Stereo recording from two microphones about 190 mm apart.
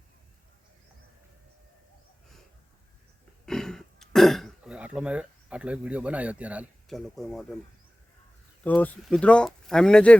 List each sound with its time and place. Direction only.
3.4 s throat clearing: 5° left (ahead or behind)
8.6 s speech: 10° left (ahead or behind)